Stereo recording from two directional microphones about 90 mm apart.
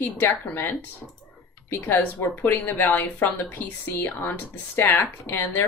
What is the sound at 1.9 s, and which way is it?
Speech, 20° left (ahead or behind).